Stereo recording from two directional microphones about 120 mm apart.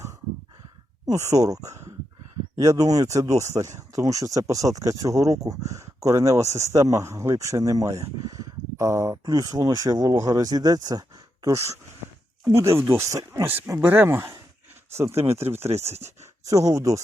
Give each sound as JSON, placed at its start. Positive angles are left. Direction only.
{"t": 1.1, "sound": "speech", "side_deg": -25}
{"t": 15.7, "sound": "speech", "side_deg": -60}
{"t": 16.5, "sound": "speech", "side_deg": -25}